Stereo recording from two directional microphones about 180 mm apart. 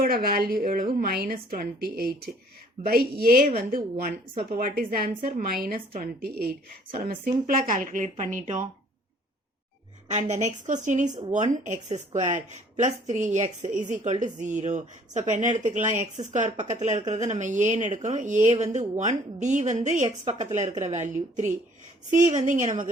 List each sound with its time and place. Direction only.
0.0 s a woman's voice: 55° right (ahead or behind)
10.1 s a woman's voice: 40° right (ahead or behind)